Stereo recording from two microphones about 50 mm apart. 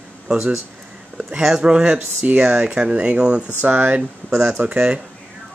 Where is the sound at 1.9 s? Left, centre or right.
Right.